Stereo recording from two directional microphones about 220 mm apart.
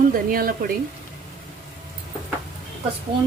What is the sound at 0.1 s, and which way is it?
Speech, 40° right (ahead or behind).